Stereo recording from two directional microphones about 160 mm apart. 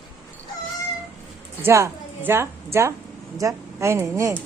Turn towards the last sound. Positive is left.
turn(degrees=-15)  # may be behind; listen again after turning